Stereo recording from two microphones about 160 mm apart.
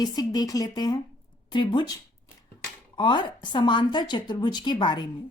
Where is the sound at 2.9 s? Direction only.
30° left (ahead or behind).